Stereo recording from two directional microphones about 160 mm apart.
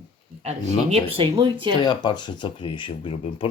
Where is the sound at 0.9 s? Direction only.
35° right (ahead or behind).